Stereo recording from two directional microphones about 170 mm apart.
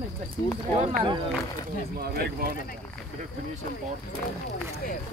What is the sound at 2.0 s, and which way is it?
Speech, 65° right (ahead or behind).